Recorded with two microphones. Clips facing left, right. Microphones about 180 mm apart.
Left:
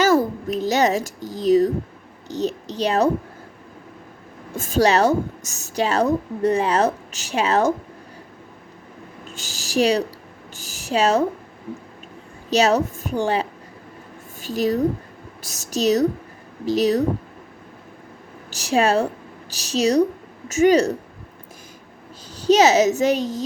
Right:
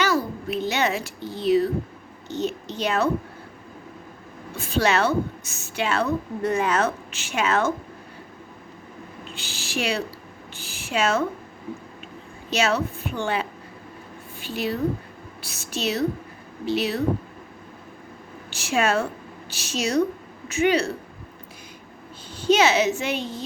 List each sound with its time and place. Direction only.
0.0 s a sound: 45° left (ahead or behind)
2.2 s a woman's voice: 35° left (ahead or behind)
4.5 s a woman's voice: 45° left (ahead or behind)
9.2 s a woman's voice: 45° left (ahead or behind)
12.5 s a woman's voice: 40° left (ahead or behind)
18.5 s speech: 35° left (ahead or behind)
22.4 s a woman's voice: 40° left (ahead or behind)